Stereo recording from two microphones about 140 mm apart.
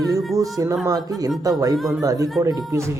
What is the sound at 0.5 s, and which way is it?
Speech, 25° right (ahead or behind).